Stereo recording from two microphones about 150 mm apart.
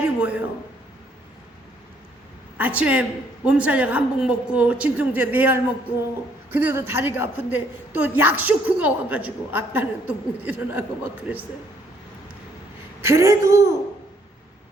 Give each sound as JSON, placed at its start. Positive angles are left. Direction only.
{"t": 0.0, "sound": "a sound", "side_deg": -10}
{"t": 2.6, "sound": "a woman's voice", "side_deg": -10}
{"t": 13.0, "sound": "speech", "side_deg": -20}